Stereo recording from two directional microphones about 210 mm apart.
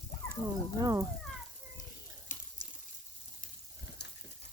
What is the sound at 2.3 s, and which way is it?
Water, 35° left (ahead or behind).